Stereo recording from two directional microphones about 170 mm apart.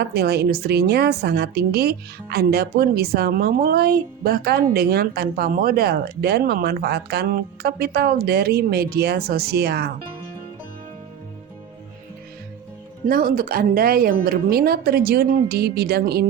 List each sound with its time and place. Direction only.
0.0 s speech: 70° right (ahead or behind)
13.1 s speech: 60° right (ahead or behind)